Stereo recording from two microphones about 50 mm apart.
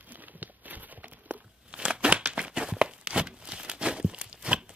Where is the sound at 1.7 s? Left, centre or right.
Centre.